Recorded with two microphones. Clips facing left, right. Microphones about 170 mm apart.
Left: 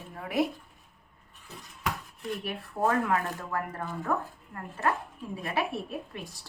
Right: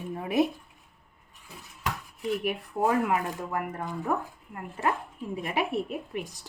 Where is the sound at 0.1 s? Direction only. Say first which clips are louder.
Right 3 dB; 20° right (ahead or behind).